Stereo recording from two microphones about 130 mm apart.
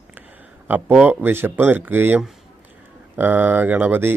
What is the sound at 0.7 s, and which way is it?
A man's voice, 10° right (ahead or behind).